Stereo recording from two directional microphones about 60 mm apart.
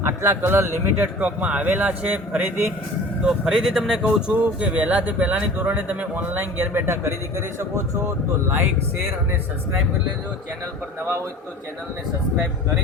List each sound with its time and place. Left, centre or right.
0.0 s a man's voice: right
1.4 s speech: right
3.2 s speech: centre
4.0 s speech: right